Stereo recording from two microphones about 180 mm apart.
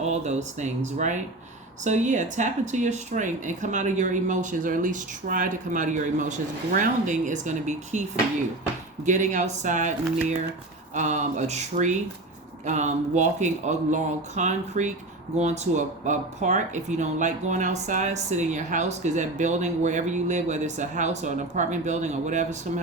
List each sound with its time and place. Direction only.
0.1 s speech: 40° right (ahead or behind)
9.0 s speech: 45° right (ahead or behind)
10.9 s speech: 40° right (ahead or behind)